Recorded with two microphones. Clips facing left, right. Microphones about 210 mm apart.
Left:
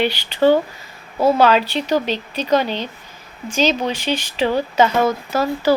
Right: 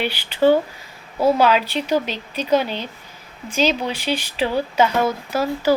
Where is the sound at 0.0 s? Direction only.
5° right (ahead or behind).